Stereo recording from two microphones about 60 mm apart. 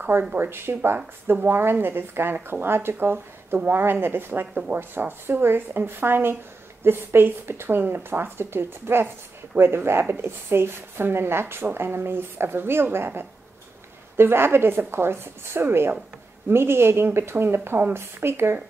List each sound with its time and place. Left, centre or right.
0.3 s a woman's voice: right
2.3 s speech: right
2.7 s a woman's voice: right